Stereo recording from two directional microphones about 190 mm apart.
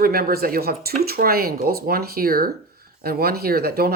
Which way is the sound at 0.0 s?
50° right (ahead or behind).